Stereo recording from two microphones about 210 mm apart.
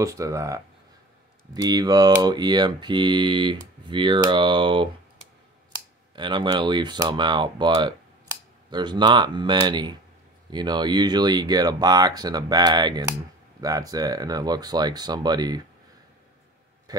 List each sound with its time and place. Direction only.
0.0 s speech: 15° right (ahead or behind)
6.1 s speech: 20° right (ahead or behind)